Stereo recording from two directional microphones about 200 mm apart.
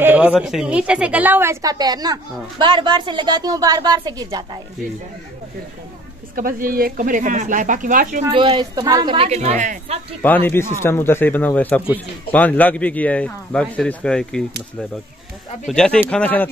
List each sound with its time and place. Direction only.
0.0 s a woman's voice: 10° right (ahead or behind)
6.3 s speech: 45° right (ahead or behind)
8.3 s a woman's voice: 25° right (ahead or behind)
10.2 s speech: 10° left (ahead or behind)
15.6 s speech: 5° left (ahead or behind)